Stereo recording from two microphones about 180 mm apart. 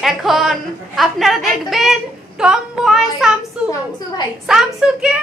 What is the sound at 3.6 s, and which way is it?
Speech, 20° left (ahead or behind).